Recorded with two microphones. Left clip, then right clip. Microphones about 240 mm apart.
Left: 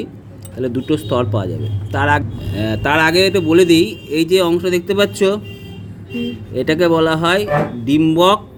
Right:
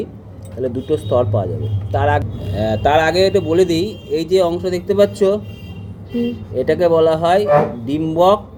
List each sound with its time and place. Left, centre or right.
0.6 s speech: left
6.5 s speech: left